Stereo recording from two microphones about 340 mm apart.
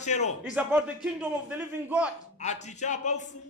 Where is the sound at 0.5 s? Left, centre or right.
Centre.